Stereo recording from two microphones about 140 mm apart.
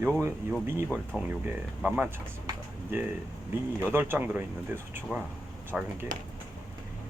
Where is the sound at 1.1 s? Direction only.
10° right (ahead or behind).